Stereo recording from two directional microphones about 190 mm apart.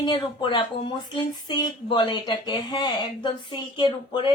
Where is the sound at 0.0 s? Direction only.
25° left (ahead or behind).